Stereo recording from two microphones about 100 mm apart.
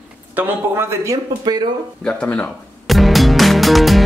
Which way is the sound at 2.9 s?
Centre (ahead or behind).